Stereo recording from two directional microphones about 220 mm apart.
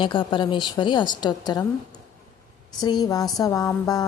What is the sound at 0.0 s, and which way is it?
A woman's voice, 20° left (ahead or behind).